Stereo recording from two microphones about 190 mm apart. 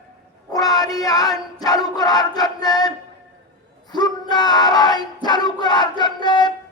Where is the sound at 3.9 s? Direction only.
20° left (ahead or behind).